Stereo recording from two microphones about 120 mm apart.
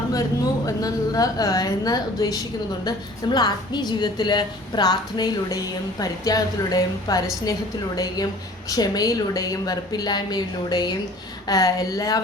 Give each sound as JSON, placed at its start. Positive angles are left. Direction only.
{"t": 0.6, "sound": "a woman's voice", "side_deg": 30}